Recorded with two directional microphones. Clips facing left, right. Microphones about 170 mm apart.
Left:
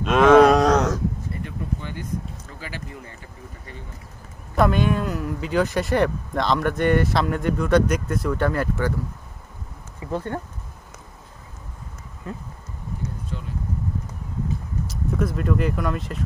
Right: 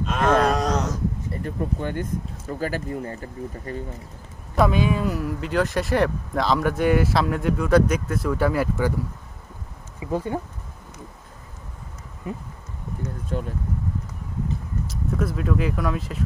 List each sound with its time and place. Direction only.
0.0 s cattle: 75° left (ahead or behind)
1.4 s speech: 50° right (ahead or behind)
4.6 s speech: centre (ahead or behind)
9.9 s speech: 10° right (ahead or behind)
12.2 s speech: 15° right (ahead or behind)
13.3 s speech: 50° right (ahead or behind)
14.9 s speech: centre (ahead or behind)